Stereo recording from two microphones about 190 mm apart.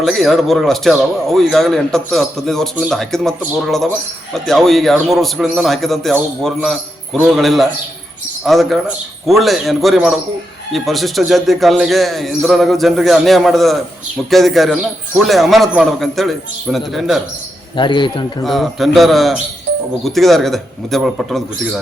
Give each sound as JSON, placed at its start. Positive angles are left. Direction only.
{"t": 0.0, "sound": "speech", "side_deg": 0}
{"t": 17.7, "sound": "speech", "side_deg": 25}
{"t": 18.4, "sound": "speech", "side_deg": 0}